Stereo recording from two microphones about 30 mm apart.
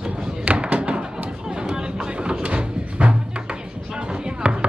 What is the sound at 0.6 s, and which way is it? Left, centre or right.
Thump, right.